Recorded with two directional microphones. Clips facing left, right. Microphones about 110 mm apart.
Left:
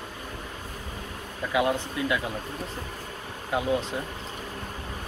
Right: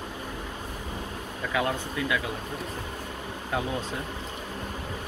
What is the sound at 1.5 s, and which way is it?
Speech, 20° left (ahead or behind).